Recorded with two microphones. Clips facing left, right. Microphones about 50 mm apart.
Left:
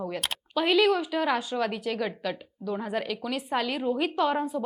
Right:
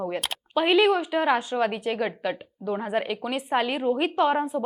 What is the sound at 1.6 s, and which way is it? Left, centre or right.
A woman's voice, right.